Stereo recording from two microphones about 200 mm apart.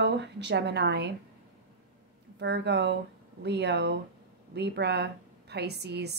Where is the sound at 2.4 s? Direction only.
60° right (ahead or behind).